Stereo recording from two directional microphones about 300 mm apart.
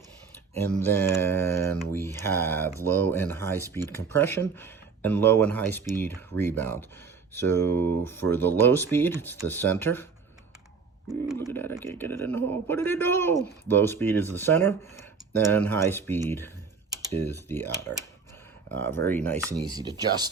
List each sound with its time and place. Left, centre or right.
0.5 s speech: centre
7.6 s speech: right
8.0 s speech: centre
11.5 s speech: centre
15.6 s speech: centre
16.9 s typing: centre
17.5 s speech: centre
19.5 s speech: centre